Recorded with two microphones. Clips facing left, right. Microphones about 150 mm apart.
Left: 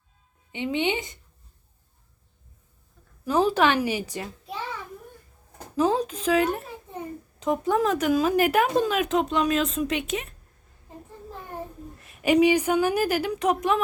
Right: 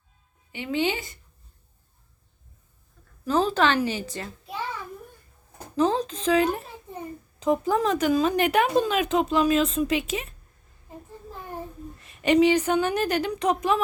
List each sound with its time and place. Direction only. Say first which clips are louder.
0.5 s speech: even; 20° left (ahead or behind)
3.2 s speech: left 1 dB; 10° left (ahead or behind)
5.7 s speech: even; 10° left (ahead or behind)
11.9 s speech: even; centre (ahead or behind)